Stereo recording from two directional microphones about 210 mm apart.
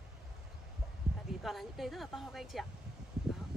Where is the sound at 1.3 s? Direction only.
Centre (ahead or behind).